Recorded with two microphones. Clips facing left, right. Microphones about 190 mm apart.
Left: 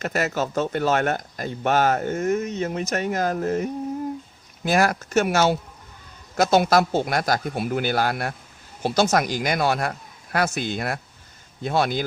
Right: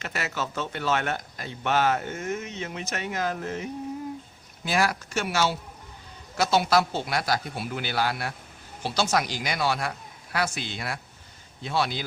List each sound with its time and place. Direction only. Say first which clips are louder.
0.0 s speech: left 7 dB; 45° left (ahead or behind)